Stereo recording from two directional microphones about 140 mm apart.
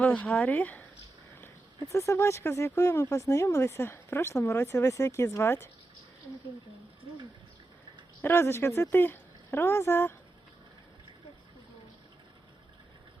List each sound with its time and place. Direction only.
0.0 s speech: 10° left (ahead or behind)
1.9 s speech: 20° left (ahead or behind)
8.2 s speech: 20° left (ahead or behind)